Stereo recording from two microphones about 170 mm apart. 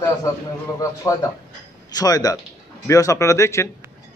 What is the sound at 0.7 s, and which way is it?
A man's voice, 20° left (ahead or behind).